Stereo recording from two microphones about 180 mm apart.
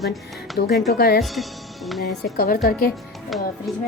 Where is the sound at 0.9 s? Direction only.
60° left (ahead or behind).